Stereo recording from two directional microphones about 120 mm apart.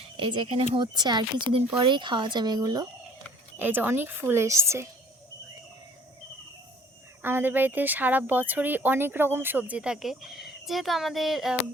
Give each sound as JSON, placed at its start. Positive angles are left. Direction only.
{"t": 0.2, "sound": "speech", "side_deg": -40}
{"t": 0.9, "sound": "speech", "side_deg": -35}
{"t": 3.6, "sound": "a woman's voice", "side_deg": -15}
{"t": 7.2, "sound": "speech", "side_deg": -15}